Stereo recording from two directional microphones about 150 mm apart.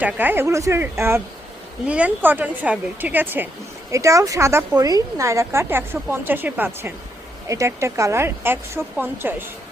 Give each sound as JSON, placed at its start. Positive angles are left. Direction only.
{"t": 0.0, "sound": "a woman's voice", "side_deg": -10}